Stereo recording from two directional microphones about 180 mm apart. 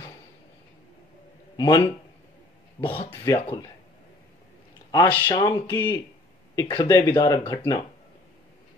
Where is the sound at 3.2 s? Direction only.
20° left (ahead or behind).